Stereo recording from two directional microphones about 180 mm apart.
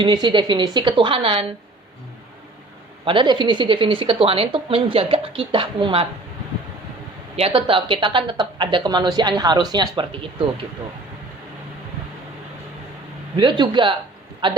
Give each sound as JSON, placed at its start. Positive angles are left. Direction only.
{"t": 0.0, "sound": "a woman's voice", "side_deg": -25}
{"t": 3.0, "sound": "a woman's voice", "side_deg": -30}
{"t": 7.3, "sound": "a woman's voice", "side_deg": -30}
{"t": 13.3, "sound": "a woman's voice", "side_deg": -25}